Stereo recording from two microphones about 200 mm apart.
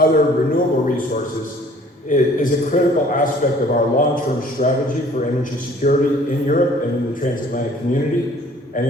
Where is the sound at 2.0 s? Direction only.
40° left (ahead or behind).